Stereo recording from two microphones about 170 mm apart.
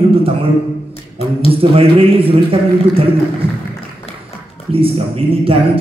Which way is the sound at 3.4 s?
30° right (ahead or behind).